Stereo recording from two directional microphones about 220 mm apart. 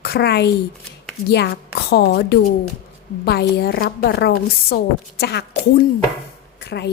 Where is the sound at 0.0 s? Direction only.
45° left (ahead or behind).